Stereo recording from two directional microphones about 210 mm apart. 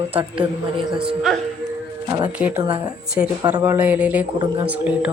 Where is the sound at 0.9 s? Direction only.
5° right (ahead or behind).